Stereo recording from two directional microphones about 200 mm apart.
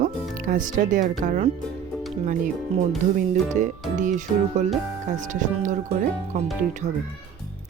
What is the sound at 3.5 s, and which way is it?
Speech, 35° right (ahead or behind).